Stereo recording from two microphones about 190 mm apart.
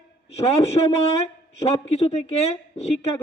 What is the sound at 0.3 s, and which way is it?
A woman's voice, 35° left (ahead or behind).